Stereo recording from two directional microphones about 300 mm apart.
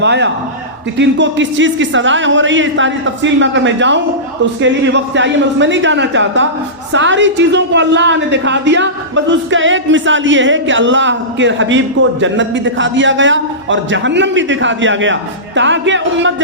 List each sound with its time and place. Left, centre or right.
0.0 s a woman's voice: right